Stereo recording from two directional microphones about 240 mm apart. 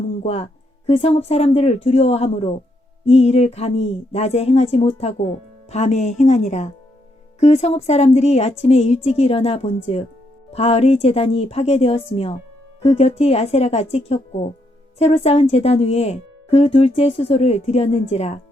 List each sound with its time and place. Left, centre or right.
0.2 s a woman's voice: left